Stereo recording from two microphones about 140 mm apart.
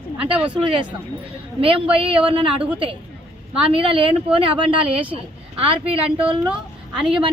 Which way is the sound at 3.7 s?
40° right (ahead or behind).